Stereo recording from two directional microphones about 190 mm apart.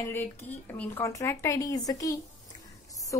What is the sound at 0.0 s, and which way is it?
A woman's voice, 10° left (ahead or behind).